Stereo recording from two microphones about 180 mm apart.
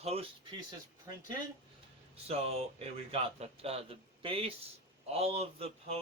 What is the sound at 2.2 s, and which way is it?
Speech, 35° right (ahead or behind).